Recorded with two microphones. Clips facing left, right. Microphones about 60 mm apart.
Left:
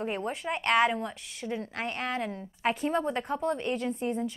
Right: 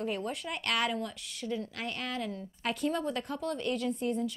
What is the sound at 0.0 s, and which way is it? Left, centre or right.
A woman's voice, left.